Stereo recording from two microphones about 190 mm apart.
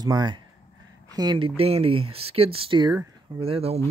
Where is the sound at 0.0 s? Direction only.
20° right (ahead or behind).